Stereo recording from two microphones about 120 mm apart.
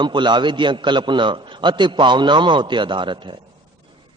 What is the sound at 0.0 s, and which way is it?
A man's voice, 40° right (ahead or behind).